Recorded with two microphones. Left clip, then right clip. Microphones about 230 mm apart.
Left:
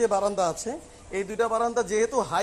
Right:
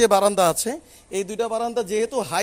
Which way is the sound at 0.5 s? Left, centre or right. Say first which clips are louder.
Right 5 dB; right.